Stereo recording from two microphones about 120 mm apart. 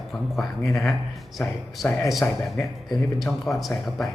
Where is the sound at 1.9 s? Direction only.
25° left (ahead or behind).